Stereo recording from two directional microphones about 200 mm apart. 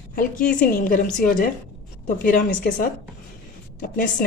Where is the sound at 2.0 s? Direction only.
50° left (ahead or behind).